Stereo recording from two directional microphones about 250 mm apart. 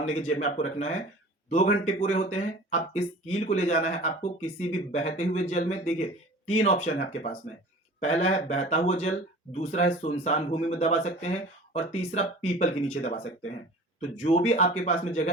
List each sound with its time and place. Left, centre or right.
0.0 s speech: left
14.3 s speech: left